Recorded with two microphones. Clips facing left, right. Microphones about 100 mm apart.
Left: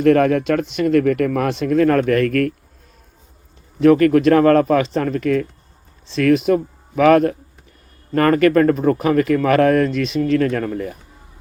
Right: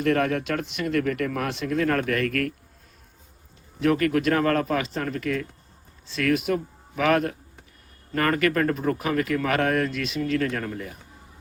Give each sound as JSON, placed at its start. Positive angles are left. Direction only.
{"t": 0.0, "sound": "speech", "side_deg": 45}
{"t": 3.8, "sound": "speech", "side_deg": 45}
{"t": 6.1, "sound": "speech", "side_deg": 35}
{"t": 6.5, "sound": "speech", "side_deg": 45}